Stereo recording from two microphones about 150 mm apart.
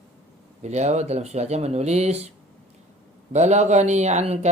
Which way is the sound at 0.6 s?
50° right (ahead or behind).